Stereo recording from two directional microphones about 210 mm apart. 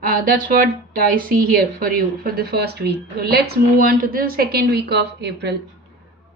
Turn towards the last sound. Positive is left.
turn(degrees=-55)  # may be behind; listen again after turning